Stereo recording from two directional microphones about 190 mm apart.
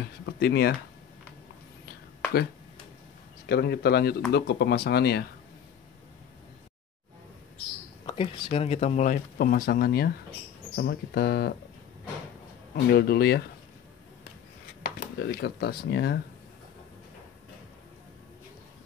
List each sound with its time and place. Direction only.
0.3 s speech: 60° left (ahead or behind)
3.4 s speech: 60° left (ahead or behind)
8.1 s speech: 30° left (ahead or behind); by 11.5 s 55° left (ahead or behind)
12.7 s speech: 55° left (ahead or behind)
14.8 s speech: 60° left (ahead or behind)